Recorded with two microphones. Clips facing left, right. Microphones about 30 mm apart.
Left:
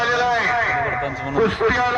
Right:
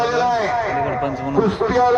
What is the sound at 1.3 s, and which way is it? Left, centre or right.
Speech, left.